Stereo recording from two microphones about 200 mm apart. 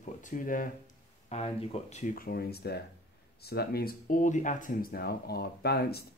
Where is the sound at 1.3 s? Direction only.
30° left (ahead or behind).